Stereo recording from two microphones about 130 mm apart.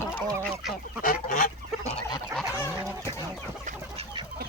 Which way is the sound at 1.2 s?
90° left.